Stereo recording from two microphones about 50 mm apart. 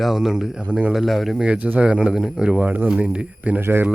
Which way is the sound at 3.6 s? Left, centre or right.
Right.